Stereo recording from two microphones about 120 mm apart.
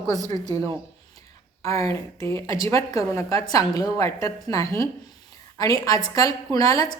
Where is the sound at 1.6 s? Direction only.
30° left (ahead or behind).